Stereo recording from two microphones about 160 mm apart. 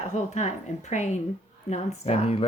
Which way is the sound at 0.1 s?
45° left (ahead or behind).